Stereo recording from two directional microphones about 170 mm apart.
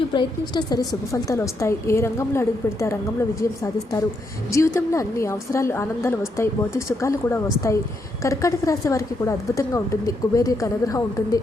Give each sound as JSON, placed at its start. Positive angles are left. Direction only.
{"t": 0.1, "sound": "a woman's voice", "side_deg": 25}
{"t": 4.5, "sound": "a woman's voice", "side_deg": 15}